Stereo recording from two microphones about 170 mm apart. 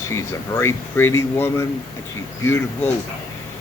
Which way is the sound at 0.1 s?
15° left (ahead or behind).